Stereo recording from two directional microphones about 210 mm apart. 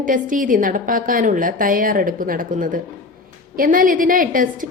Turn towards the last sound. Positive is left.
turn(degrees=-40)  # may be behind; listen again after turning